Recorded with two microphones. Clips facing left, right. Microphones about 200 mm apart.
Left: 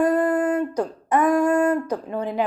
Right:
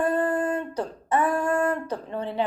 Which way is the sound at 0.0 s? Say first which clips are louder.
Left 4 dB; 15° left (ahead or behind).